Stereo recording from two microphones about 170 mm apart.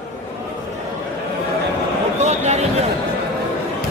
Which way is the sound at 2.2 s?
40° right (ahead or behind).